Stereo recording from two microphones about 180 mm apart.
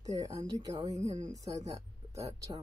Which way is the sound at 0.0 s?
20° right (ahead or behind).